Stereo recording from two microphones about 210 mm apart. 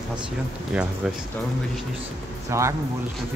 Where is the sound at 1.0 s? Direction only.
Centre (ahead or behind).